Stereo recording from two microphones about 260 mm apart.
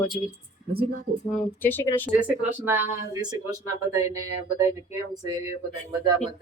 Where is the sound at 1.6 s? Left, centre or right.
Centre.